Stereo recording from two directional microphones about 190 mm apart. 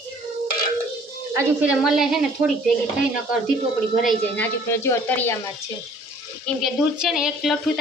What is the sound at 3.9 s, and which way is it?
A woman's voice, centre (ahead or behind).